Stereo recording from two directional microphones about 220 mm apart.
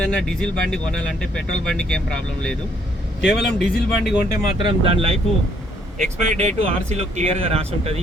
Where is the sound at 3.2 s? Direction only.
50° left (ahead or behind).